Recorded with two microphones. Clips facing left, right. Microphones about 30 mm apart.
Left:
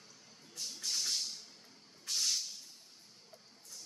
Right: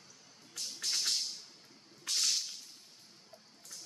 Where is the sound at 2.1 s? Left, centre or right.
Right.